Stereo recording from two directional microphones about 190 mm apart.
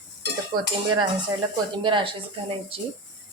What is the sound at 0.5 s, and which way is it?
Speech, 20° right (ahead or behind).